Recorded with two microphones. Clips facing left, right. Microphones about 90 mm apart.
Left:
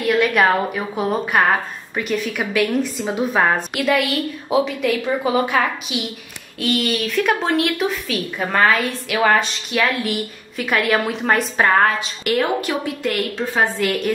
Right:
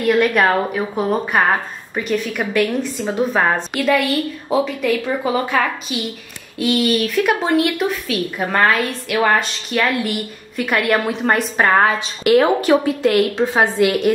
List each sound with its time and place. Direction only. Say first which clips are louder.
0.0 s a woman's voice: right 1 dB; centre (ahead or behind)
6.6 s a woman's voice: right 4 dB; centre (ahead or behind)
12.3 s a woman's voice: right 7 dB; 25° right (ahead or behind)